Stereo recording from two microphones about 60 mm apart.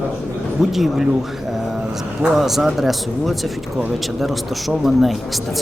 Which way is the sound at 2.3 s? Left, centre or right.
Centre.